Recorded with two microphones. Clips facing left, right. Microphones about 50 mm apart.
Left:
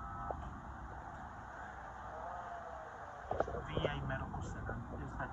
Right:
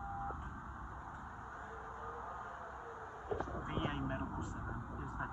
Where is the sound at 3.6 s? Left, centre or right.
Left.